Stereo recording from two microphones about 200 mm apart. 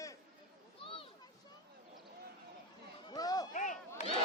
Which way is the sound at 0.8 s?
25° left (ahead or behind).